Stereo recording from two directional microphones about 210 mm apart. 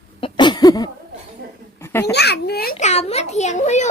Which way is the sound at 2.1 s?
50° left (ahead or behind).